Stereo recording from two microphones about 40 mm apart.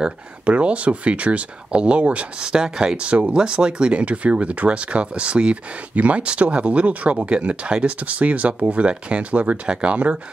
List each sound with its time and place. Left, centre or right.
0.5 s speech: right
2.4 s speech: right
4.0 s speech: right